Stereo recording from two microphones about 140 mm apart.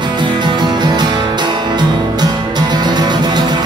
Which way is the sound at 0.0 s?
30° right (ahead or behind).